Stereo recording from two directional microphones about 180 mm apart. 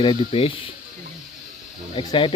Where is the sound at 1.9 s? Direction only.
30° left (ahead or behind).